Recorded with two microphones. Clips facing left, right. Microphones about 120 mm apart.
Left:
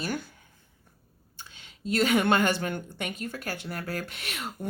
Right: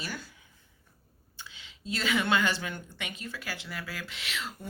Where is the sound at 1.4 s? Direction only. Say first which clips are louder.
Left 3 dB; 50° left (ahead or behind).